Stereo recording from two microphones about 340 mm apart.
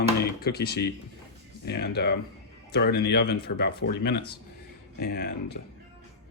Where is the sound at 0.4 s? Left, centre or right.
Left.